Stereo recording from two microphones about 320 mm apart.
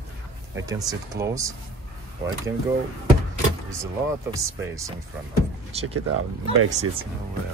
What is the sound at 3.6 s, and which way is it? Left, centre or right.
Speech, centre.